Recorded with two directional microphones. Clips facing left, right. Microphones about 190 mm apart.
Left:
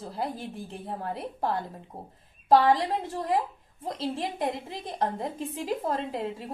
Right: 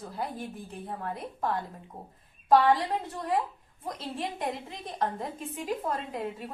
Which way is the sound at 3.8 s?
25° left (ahead or behind).